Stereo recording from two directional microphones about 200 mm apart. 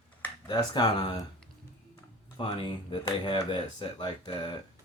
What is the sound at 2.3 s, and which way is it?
Speech, 25° left (ahead or behind).